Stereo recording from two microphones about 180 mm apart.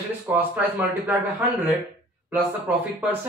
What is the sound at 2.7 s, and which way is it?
Speech, 10° right (ahead or behind).